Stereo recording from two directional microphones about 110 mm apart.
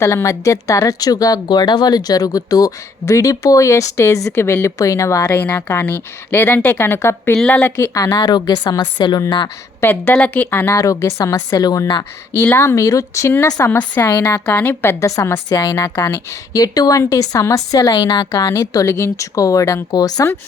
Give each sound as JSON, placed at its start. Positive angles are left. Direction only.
{"t": 0.0, "sound": "a woman's voice", "side_deg": 30}
{"t": 7.9, "sound": "speech", "side_deg": 35}
{"t": 9.8, "sound": "a woman's voice", "side_deg": 15}
{"t": 18.3, "sound": "speech", "side_deg": 25}